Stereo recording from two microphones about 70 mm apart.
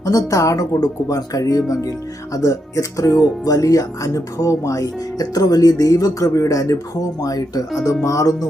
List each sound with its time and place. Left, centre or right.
0.0 s speech: left